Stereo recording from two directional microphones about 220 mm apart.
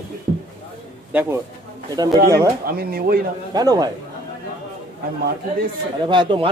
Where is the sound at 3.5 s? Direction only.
15° right (ahead or behind).